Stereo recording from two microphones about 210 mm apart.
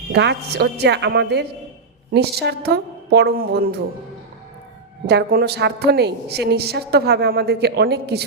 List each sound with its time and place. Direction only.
0.1 s a woman's voice: 55° right (ahead or behind)
5.0 s a woman's voice: 50° right (ahead or behind)